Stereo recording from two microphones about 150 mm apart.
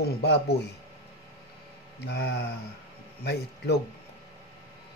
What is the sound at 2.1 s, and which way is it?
A man's voice, 90° left.